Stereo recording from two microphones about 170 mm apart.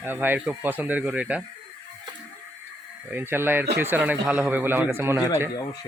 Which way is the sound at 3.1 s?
15° right (ahead or behind).